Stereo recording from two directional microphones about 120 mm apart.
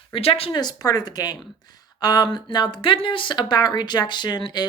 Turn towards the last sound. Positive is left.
turn(degrees=35)  # may be behind; listen again after turning